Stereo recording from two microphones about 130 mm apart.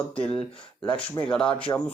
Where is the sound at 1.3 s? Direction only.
10° left (ahead or behind).